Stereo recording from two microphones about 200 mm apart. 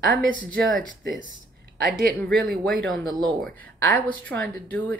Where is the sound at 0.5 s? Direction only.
Centre (ahead or behind).